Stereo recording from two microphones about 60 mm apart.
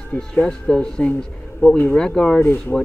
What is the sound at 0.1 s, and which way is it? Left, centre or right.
Speech, centre.